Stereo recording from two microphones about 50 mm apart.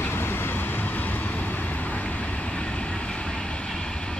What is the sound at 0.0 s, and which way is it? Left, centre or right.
Vehicle, left.